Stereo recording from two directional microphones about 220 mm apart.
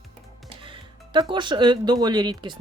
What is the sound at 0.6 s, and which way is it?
A woman's voice, 20° right (ahead or behind).